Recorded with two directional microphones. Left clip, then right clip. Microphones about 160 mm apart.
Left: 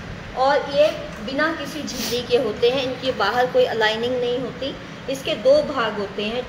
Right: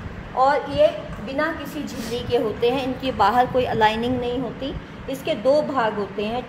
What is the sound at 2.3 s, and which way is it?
A woman's voice, 90° right.